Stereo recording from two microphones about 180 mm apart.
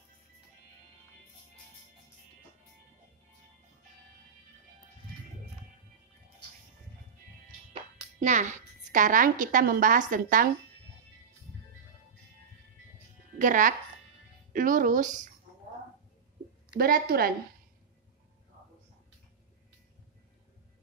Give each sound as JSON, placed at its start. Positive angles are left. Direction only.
{"t": 7.7, "sound": "a woman's voice", "side_deg": -40}
{"t": 13.4, "sound": "speech", "side_deg": -45}
{"t": 16.7, "sound": "a woman's voice", "side_deg": -55}